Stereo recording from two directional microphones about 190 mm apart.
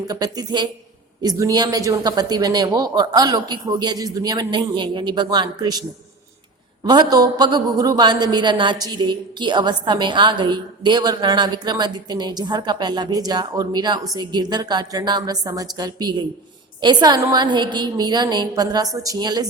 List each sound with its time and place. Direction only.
0.1 s a woman's voice: 20° right (ahead or behind)
6.8 s a woman's voice: 20° right (ahead or behind)